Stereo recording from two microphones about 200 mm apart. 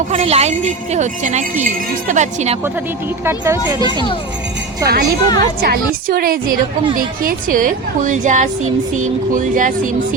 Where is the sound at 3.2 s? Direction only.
15° right (ahead or behind).